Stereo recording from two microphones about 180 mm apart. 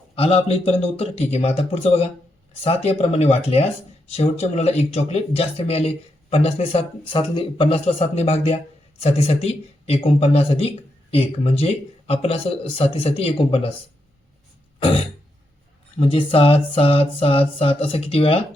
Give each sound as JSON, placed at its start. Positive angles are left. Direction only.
{"t": 0.2, "sound": "speech", "side_deg": 30}
{"t": 16.0, "sound": "speech", "side_deg": 30}